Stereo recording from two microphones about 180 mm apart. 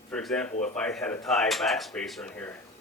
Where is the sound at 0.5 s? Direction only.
40° left (ahead or behind).